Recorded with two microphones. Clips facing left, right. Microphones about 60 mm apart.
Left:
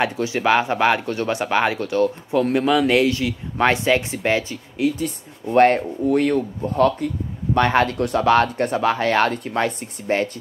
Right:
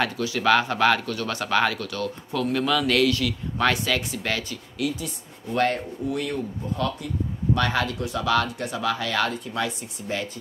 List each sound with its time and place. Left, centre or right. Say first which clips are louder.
0.0 s speech: left 3 dB; left